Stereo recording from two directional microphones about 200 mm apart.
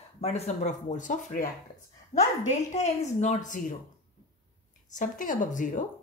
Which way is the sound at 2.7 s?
35° left (ahead or behind).